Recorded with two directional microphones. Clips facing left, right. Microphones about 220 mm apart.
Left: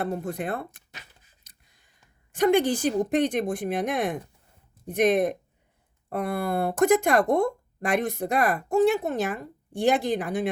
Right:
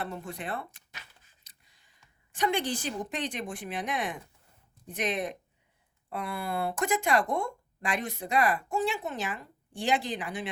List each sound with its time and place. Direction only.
0.0 s speech: 50° left (ahead or behind)
2.3 s speech: 55° left (ahead or behind)